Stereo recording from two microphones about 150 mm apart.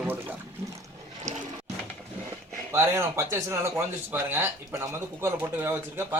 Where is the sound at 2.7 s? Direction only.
15° right (ahead or behind).